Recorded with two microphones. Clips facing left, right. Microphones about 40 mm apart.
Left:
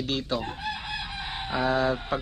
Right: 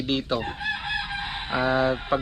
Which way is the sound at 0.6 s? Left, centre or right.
Right.